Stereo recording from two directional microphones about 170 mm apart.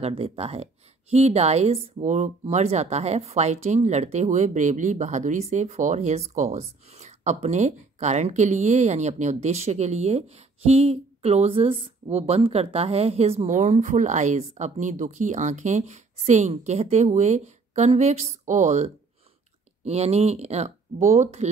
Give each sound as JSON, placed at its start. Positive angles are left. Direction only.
{"t": 0.0, "sound": "speech", "side_deg": -35}